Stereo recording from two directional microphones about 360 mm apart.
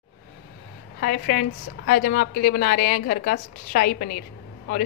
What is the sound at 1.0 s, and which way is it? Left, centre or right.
A woman's voice, left.